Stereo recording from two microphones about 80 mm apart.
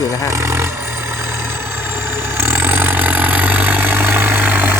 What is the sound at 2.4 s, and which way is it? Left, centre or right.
Vehicle, right.